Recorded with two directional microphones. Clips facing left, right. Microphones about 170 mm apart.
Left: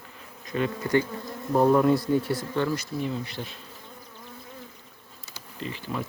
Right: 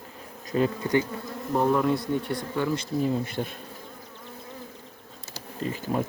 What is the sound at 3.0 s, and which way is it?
Speech, 45° right (ahead or behind).